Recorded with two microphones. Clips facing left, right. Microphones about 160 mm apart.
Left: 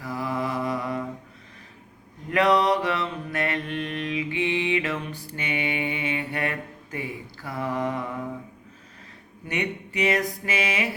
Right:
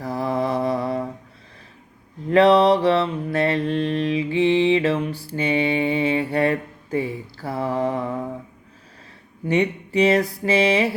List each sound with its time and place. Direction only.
0.0 s mantra: 35° right (ahead or behind)
2.3 s mantra: 30° right (ahead or behind)
9.5 s speech: 30° right (ahead or behind)